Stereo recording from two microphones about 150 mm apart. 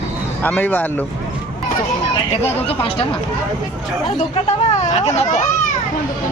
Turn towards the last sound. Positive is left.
turn(degrees=45)  # may be behind; listen again after turning